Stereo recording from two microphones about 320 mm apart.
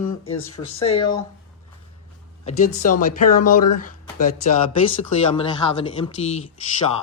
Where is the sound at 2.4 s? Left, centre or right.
Left.